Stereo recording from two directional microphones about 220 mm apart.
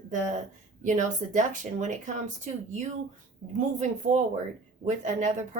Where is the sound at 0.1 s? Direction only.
35° right (ahead or behind).